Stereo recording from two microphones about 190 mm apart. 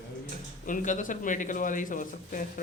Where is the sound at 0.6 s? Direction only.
45° left (ahead or behind).